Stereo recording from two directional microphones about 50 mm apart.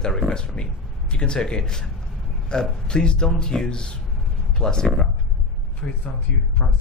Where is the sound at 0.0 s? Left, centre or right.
Centre.